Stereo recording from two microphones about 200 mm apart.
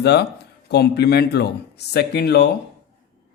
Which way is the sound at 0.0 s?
55° left (ahead or behind).